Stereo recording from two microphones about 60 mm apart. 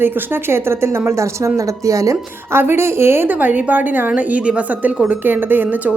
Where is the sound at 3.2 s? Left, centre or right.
Right.